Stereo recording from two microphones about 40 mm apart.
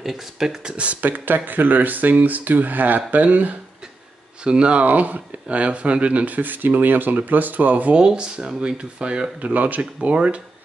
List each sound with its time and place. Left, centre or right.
0.0 s speech: centre
0.7 s speech: right
1.0 s speech: right
4.5 s speech: right
4.8 s speech: right
7.9 s speech: right
9.4 s speech: right
10.0 s speech: right